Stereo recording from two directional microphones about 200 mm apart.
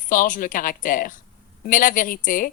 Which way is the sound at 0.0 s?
40° left (ahead or behind).